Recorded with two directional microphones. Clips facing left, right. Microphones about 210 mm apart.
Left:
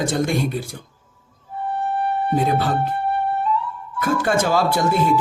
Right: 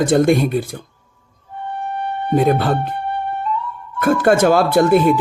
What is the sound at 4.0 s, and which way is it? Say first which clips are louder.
Speech: right 6 dB; 55° right (ahead or behind).